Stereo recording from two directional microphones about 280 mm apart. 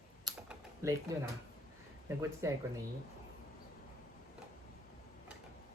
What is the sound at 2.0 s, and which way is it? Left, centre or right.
Speech, centre.